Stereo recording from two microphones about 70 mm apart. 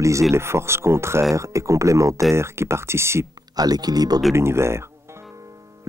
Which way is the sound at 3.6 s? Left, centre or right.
Right.